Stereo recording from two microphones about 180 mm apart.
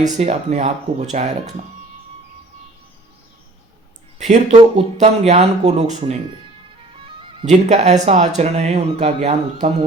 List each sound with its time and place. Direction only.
0.2 s speech: 35° right (ahead or behind)
4.2 s speech: 35° right (ahead or behind)
7.4 s speech: 40° right (ahead or behind)